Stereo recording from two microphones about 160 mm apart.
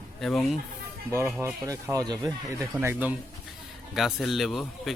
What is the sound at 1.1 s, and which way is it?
Speech, 15° right (ahead or behind).